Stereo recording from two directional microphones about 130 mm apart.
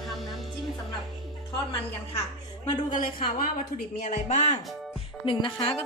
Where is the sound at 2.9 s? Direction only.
90° left.